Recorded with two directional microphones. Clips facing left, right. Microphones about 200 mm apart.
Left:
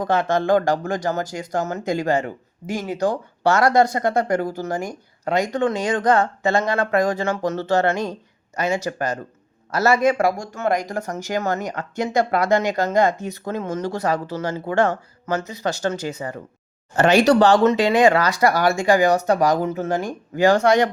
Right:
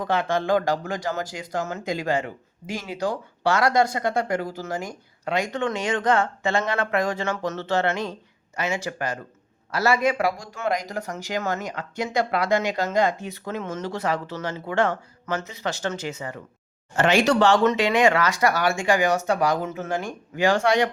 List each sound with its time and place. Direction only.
0.0 s speech: 45° left (ahead or behind)